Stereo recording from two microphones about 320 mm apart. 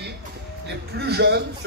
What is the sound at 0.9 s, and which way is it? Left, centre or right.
Speech, right.